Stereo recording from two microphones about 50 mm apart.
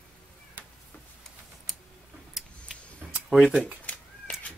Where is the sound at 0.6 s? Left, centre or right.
Right.